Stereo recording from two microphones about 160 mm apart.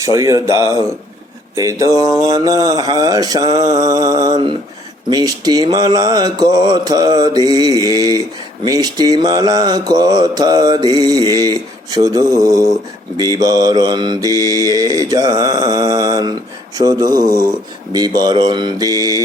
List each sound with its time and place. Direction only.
0.0 s mantra: 20° right (ahead or behind)